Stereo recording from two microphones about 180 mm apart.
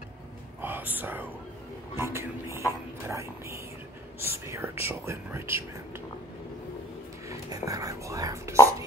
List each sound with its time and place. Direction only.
0.6 s whispering: 10° right (ahead or behind)
2.0 s a sound: 15° right (ahead or behind)
4.3 s speech: 15° right (ahead or behind)
7.2 s speech: 20° right (ahead or behind)